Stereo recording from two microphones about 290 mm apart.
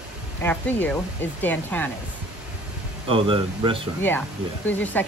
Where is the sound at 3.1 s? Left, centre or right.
Centre.